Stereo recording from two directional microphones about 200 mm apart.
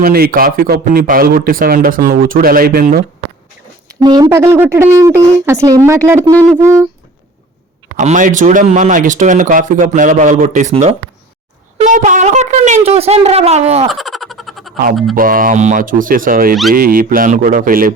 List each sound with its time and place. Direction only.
0.0 s a man's voice: 50° right (ahead or behind)
3.8 s speech: 20° right (ahead or behind)
7.9 s speech: 40° right (ahead or behind)
13.9 s a sound: centre (ahead or behind)
15.1 s a man's voice: 45° right (ahead or behind)